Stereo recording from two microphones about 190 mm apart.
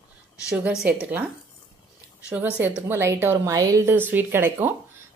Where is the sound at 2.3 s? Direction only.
10° right (ahead or behind).